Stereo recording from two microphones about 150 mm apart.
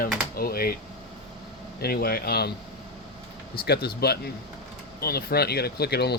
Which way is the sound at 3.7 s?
90° left.